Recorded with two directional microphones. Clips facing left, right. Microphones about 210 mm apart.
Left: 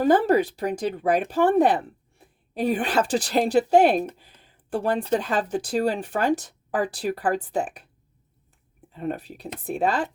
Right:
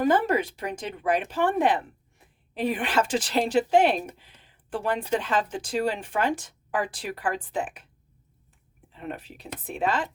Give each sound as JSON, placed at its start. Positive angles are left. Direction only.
{"t": 0.0, "sound": "speech", "side_deg": 35}
{"t": 9.0, "sound": "speech", "side_deg": 40}